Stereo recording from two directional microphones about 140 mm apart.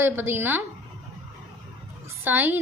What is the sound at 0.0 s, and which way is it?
Speech, 15° right (ahead or behind).